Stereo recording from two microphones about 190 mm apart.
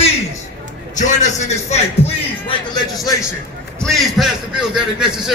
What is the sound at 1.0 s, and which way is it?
Speech, 40° left (ahead or behind).